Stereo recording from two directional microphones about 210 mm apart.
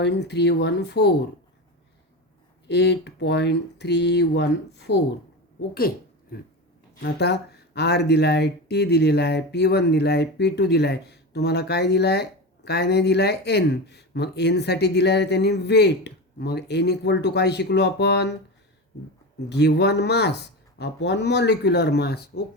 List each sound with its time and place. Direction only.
0.0 s speech: 55° left (ahead or behind)
2.6 s speech: 55° left (ahead or behind)
7.0 s speech: 50° left (ahead or behind)
19.5 s speech: 55° left (ahead or behind)